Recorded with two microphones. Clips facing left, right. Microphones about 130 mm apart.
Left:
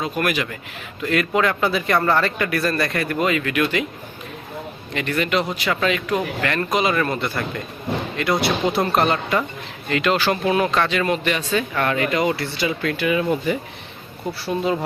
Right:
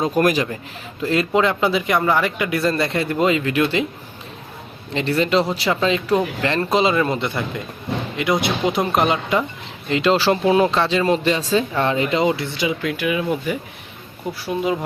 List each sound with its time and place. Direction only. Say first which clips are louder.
0.0 s a man's voice: right 5 dB; 35° right (ahead or behind)
4.9 s a man's voice: right 4 dB; 30° right (ahead or behind)
9.9 s a man's voice: right 3 dB; 30° right (ahead or behind); by 14.8 s 10° right (ahead or behind)